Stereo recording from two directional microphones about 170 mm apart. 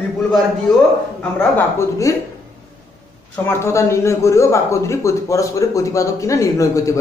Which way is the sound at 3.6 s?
15° left (ahead or behind).